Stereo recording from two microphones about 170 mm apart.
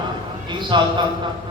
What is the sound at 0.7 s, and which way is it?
Speech, 25° right (ahead or behind).